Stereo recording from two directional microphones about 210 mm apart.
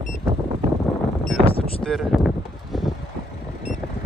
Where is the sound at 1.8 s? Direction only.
Centre (ahead or behind).